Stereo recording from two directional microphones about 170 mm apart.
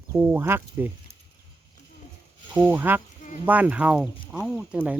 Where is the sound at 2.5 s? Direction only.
10° right (ahead or behind).